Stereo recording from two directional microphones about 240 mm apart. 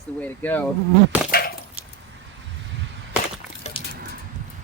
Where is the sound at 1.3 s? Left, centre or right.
Left.